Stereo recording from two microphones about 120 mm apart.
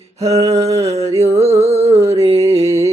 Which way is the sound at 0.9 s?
60° right (ahead or behind).